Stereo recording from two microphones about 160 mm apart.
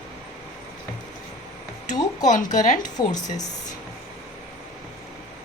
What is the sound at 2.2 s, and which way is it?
Speech, 50° left (ahead or behind).